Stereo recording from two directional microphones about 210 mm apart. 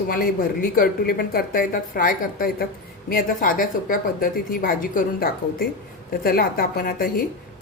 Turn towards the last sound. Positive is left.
turn(degrees=45)  # may be behind; listen again after turning